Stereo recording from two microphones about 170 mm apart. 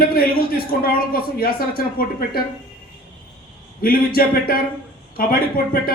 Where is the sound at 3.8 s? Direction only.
60° left (ahead or behind).